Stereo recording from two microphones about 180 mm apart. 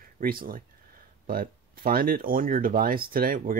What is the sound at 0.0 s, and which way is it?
Speech, 55° right (ahead or behind).